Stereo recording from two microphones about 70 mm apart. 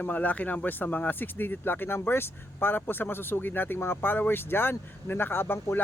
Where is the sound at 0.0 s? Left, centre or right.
Left.